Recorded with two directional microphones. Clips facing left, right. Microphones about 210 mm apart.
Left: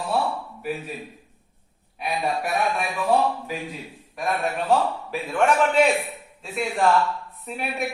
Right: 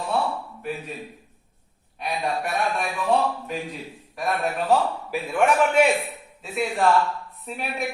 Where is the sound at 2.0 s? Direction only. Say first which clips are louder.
Left 1 dB; 5° left (ahead or behind).